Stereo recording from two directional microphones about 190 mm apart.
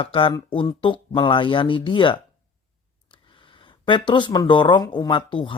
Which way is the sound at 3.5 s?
25° left (ahead or behind).